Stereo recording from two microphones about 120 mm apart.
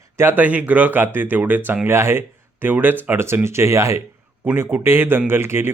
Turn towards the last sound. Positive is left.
turn(degrees=-20)  # may be behind; listen again after turning